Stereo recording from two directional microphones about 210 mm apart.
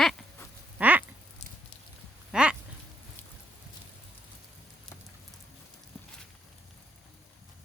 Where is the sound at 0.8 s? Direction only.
5° right (ahead or behind).